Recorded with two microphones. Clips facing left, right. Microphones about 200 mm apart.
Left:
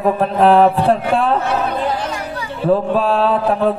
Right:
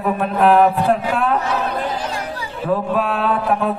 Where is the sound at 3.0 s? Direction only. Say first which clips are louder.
Left 4 dB; 30° left (ahead or behind).